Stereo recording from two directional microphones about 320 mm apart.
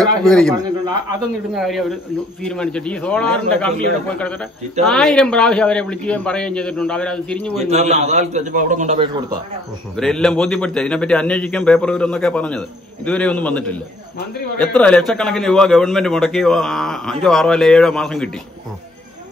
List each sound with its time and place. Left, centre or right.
0.2 s a man's voice: centre
0.5 s a man's voice: centre
1.5 s a man's voice: centre
4.8 s a man's voice: centre
7.5 s a man's voice: centre
9.9 s a man's voice: centre